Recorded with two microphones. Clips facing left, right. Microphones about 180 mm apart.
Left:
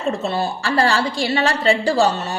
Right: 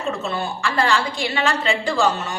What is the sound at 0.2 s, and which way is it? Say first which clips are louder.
A woman's voice: left 3 dB; 35° left (ahead or behind).